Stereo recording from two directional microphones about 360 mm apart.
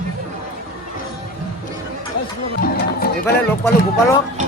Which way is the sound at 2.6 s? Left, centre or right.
Left.